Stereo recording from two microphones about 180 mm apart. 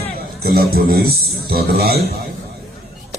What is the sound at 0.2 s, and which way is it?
A man's voice, 55° right (ahead or behind).